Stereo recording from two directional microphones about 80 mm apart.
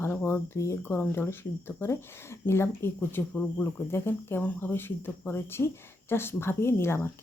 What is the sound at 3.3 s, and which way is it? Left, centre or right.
Speech, centre.